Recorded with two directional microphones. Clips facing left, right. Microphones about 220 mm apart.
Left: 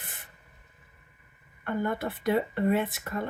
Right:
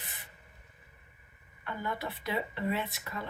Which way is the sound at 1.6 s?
50° left (ahead or behind).